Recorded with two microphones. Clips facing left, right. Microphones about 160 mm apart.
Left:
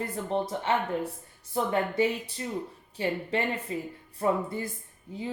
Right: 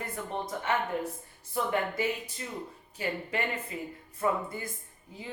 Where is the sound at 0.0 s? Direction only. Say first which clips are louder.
Left 6 dB; 30° left (ahead or behind).